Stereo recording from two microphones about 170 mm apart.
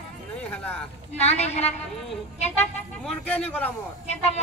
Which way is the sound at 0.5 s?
10° left (ahead or behind).